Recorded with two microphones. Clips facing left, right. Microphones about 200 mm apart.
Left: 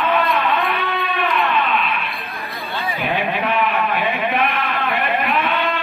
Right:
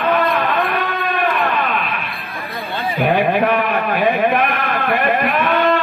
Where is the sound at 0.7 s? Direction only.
50° right (ahead or behind).